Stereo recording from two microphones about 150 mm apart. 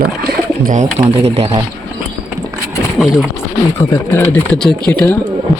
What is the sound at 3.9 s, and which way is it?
Speech, 15° left (ahead or behind).